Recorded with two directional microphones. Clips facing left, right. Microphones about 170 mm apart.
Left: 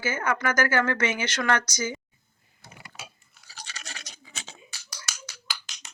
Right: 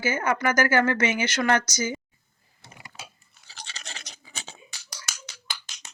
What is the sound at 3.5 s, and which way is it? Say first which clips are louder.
Toothbrush: even; 25° right (ahead or behind).